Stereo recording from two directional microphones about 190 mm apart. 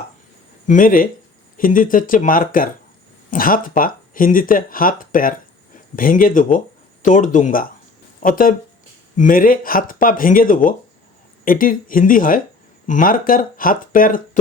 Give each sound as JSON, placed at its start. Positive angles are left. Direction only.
{"t": 0.7, "sound": "speech", "side_deg": 45}